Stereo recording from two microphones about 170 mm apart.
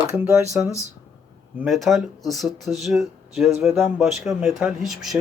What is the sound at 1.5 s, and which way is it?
Speech, centre (ahead or behind).